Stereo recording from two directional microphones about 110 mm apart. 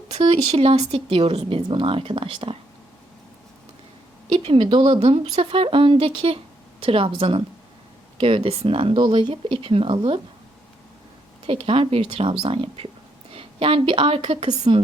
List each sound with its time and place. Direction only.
0.1 s speech: 65° right (ahead or behind)
4.3 s speech: 55° right (ahead or behind)
9.3 s speech: 60° right (ahead or behind)
11.4 s a woman's voice: 60° right (ahead or behind)